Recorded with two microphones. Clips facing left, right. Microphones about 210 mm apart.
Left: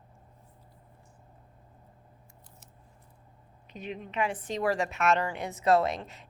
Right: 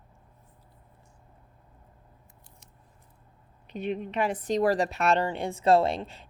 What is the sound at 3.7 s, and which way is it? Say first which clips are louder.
Speech: right 8 dB; 65° right (ahead or behind).